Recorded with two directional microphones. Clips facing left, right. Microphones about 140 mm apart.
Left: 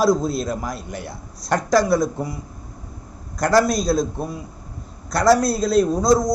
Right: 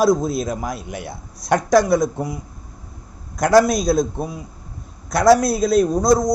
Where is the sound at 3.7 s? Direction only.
Centre (ahead or behind).